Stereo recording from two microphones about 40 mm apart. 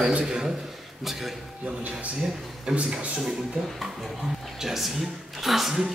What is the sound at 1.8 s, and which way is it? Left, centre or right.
Speech, right.